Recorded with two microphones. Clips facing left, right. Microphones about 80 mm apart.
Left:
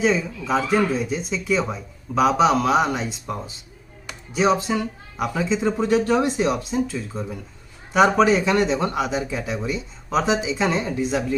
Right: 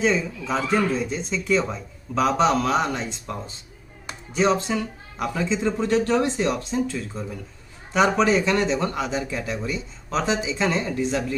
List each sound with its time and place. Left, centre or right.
0.0 s speech: centre